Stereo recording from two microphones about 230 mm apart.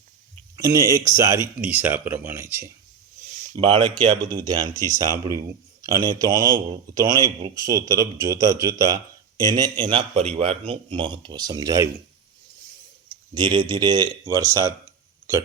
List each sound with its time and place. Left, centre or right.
0.6 s speech: centre
3.2 s a sound: right
3.6 s speech: centre
13.3 s speech: centre